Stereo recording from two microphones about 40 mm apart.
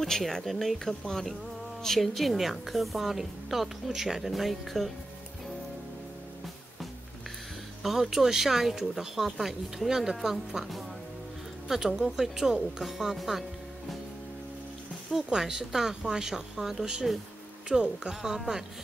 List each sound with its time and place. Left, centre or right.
0.0 s a woman's voice: centre
7.8 s speech: centre
15.2 s speech: centre
17.1 s a woman's voice: centre
17.6 s speech: right